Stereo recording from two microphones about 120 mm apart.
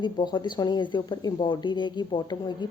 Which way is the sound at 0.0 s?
40° left (ahead or behind).